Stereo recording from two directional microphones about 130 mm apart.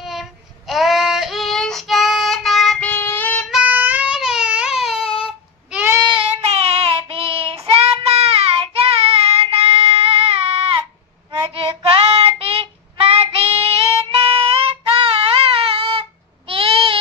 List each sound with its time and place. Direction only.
0.0 s child singing: centre (ahead or behind)
2.8 s child singing: 15° left (ahead or behind)
3.4 s baby cry: 10° right (ahead or behind)
5.0 s a sound: 45° left (ahead or behind)
5.7 s a sound: 15° right (ahead or behind)
6.0 s child singing: 45° right (ahead or behind)